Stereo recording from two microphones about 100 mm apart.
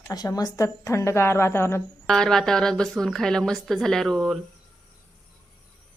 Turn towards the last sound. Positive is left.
turn(degrees=0)  # may be behind; listen again after turning